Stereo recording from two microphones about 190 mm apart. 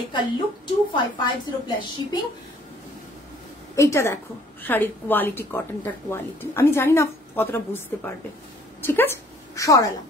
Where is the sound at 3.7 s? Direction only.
15° left (ahead or behind).